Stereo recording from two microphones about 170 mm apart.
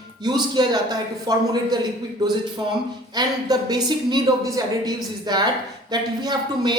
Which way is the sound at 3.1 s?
25° right (ahead or behind).